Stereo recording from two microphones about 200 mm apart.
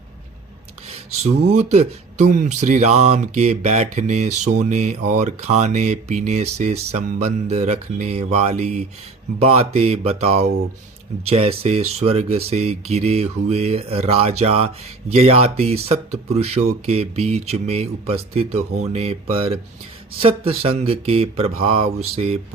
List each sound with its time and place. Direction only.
0.9 s speech: 35° right (ahead or behind)